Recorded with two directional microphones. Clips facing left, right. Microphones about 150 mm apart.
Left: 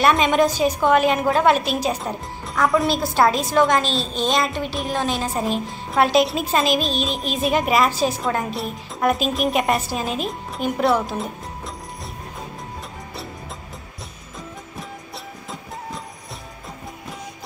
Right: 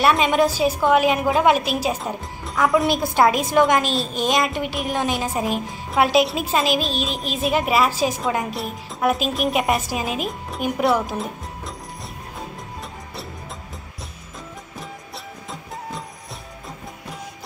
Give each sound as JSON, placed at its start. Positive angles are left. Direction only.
{"t": 0.0, "sound": "a woman's voice", "side_deg": 0}
{"t": 2.9, "sound": "a woman's voice", "side_deg": -15}
{"t": 5.1, "sound": "a woman's voice", "side_deg": -5}